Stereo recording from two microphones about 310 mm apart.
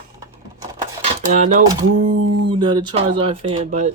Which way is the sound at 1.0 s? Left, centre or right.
Right.